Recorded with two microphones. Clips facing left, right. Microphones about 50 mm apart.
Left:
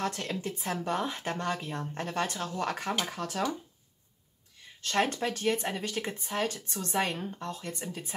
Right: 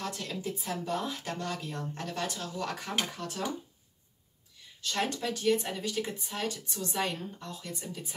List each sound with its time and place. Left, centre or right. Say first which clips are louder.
0.0 s speech: left 3 dB; left
4.8 s speech: left 3 dB; left